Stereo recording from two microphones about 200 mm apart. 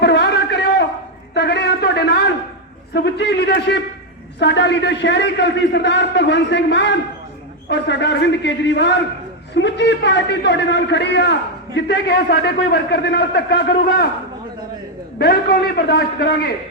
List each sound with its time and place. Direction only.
0.0 s a sound: 60° left (ahead or behind)
2.9 s a man's voice: 55° left (ahead or behind)
15.2 s a man's voice: 50° left (ahead or behind)